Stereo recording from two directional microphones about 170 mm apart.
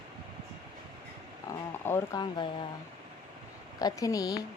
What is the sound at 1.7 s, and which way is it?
Speech, 15° left (ahead or behind).